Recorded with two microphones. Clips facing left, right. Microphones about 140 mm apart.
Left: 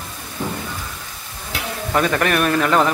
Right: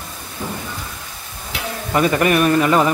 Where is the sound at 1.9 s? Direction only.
5° right (ahead or behind).